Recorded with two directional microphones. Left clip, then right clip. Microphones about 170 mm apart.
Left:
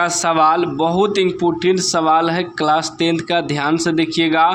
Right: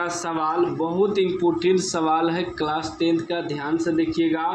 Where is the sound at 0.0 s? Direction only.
45° left (ahead or behind).